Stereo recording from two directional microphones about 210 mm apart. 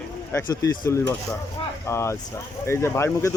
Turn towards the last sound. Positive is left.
turn(degrees=15)  # may be behind; listen again after turning